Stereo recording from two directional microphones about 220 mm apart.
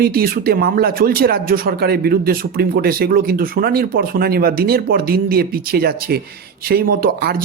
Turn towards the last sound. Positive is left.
turn(degrees=-45)  # may be behind; listen again after turning